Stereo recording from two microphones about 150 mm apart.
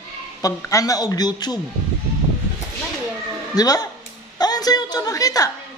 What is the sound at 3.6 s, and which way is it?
A man's voice, 25° left (ahead or behind).